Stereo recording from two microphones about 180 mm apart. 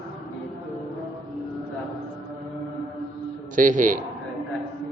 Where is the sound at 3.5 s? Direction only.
45° right (ahead or behind).